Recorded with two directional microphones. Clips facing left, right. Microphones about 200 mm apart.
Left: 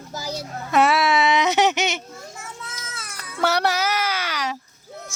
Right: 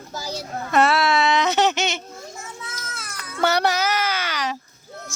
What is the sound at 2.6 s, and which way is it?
Children playing, centre (ahead or behind).